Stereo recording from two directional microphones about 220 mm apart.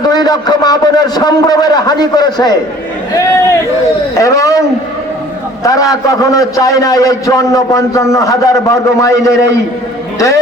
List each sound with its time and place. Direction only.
0.1 s a man's voice: 20° left (ahead or behind)
3.1 s a sound: 15° left (ahead or behind)
4.2 s a man's voice: 15° left (ahead or behind)
5.6 s a man's voice: 15° left (ahead or behind)